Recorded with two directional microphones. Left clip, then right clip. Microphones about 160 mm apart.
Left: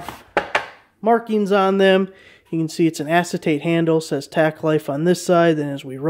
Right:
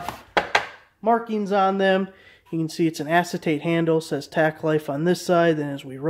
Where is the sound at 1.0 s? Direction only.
65° left (ahead or behind); by 2.0 s 45° left (ahead or behind).